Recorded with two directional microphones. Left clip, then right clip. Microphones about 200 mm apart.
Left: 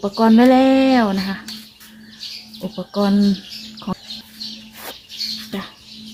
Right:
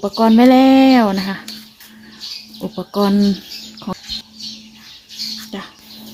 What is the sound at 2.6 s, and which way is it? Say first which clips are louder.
Speech: right 3 dB; 40° right (ahead or behind).